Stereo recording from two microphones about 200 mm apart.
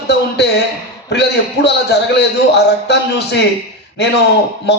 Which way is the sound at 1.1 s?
55° left (ahead or behind).